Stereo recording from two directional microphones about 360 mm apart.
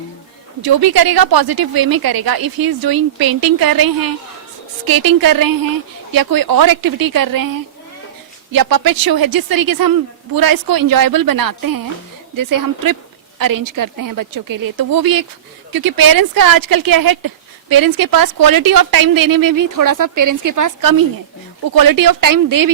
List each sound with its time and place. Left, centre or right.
0.6 s a woman's voice: right
8.5 s a woman's voice: right
21.7 s a woman's voice: right